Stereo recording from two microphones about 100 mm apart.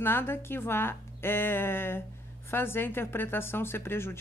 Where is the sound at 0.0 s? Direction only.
20° left (ahead or behind).